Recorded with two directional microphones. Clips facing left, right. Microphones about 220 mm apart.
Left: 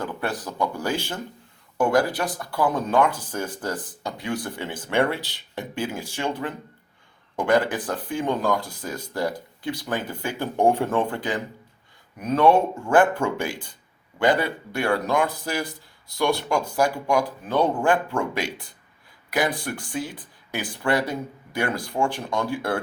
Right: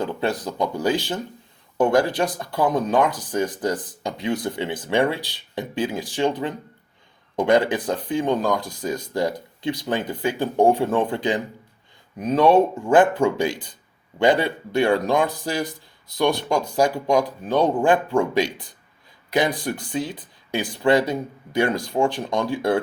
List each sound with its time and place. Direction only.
0.0 s speech: 20° right (ahead or behind)
7.3 s speech: 20° right (ahead or behind)